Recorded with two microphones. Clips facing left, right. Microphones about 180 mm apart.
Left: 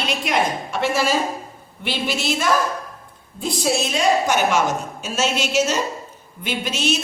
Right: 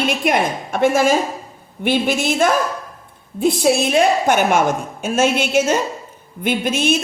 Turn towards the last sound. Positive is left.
turn(degrees=-50)  # may be behind; listen again after turning